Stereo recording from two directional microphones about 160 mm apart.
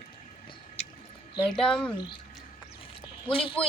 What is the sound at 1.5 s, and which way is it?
Speech, 5° left (ahead or behind).